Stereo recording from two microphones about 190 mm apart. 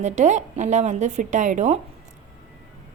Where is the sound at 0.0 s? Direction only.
40° right (ahead or behind).